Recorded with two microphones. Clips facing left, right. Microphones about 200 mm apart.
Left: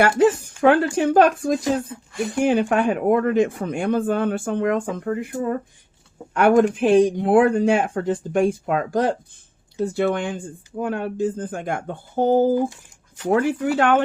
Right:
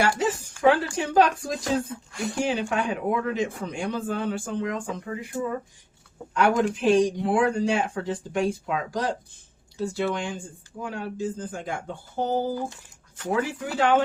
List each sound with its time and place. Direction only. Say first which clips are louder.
0.2 s speech: left 6 dB; 55° left (ahead or behind)